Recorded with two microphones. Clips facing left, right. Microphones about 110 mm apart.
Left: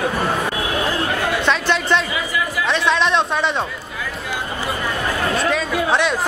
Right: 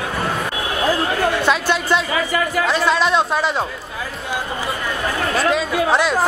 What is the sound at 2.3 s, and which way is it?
Music, 50° right (ahead or behind).